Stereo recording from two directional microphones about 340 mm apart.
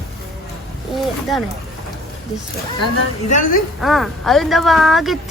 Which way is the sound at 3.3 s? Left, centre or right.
Left.